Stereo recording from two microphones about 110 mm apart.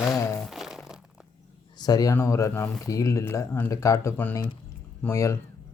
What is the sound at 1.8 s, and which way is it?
Speech, 35° left (ahead or behind).